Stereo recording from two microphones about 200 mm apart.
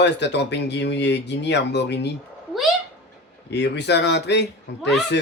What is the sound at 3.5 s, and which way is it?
Speech, 55° left (ahead or behind).